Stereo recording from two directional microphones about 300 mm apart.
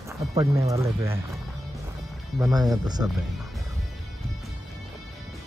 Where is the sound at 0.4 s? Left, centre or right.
Centre.